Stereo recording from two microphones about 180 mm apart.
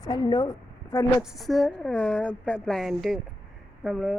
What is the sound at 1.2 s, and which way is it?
A woman's voice, centre (ahead or behind).